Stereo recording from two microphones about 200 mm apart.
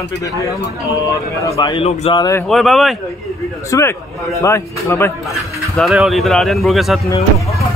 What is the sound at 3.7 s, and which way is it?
Speech, 15° left (ahead or behind).